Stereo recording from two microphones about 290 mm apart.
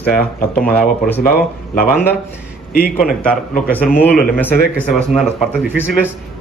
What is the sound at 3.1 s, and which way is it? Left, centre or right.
Speech, centre.